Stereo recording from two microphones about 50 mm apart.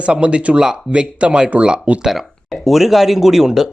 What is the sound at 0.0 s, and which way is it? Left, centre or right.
Speech, right.